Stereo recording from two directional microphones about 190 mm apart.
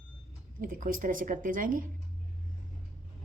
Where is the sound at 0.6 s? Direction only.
45° right (ahead or behind).